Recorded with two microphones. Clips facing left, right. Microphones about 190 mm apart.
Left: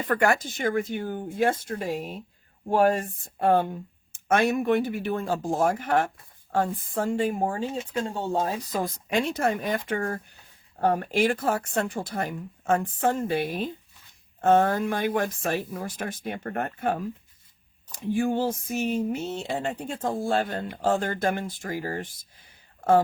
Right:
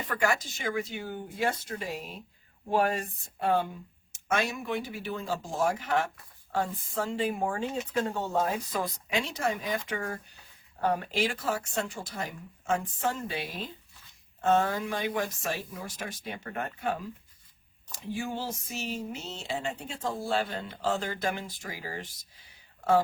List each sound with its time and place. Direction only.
0.1 s speech: 55° left (ahead or behind)